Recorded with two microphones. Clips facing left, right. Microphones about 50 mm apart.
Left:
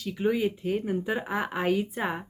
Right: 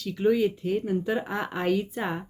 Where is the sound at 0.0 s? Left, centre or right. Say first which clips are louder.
Right 3 dB; centre.